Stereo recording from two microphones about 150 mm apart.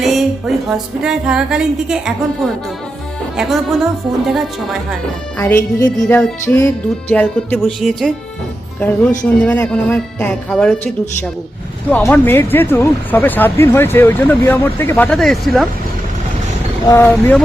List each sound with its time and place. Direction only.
0.0 s music: centre (ahead or behind)
3.3 s speech: centre (ahead or behind)
5.4 s speech: 15° left (ahead or behind)
16.8 s speech: 20° left (ahead or behind)
17.1 s speech: 5° left (ahead or behind)